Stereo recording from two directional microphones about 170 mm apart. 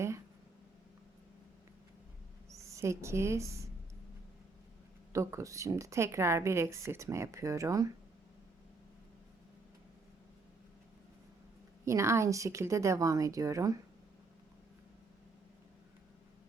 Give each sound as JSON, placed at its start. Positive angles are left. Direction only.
{"t": 2.5, "sound": "a woman's voice", "side_deg": -15}
{"t": 5.1, "sound": "a woman's voice", "side_deg": -20}
{"t": 11.9, "sound": "a woman's voice", "side_deg": -15}